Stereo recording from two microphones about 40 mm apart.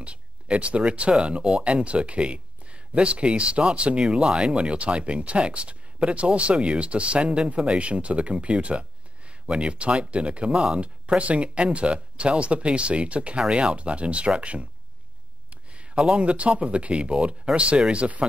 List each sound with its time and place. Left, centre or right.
0.0 s speech: right
4.1 s speech: centre; by 18.2 s right